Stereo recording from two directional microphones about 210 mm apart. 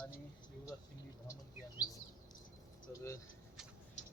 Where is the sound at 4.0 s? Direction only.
35° left (ahead or behind).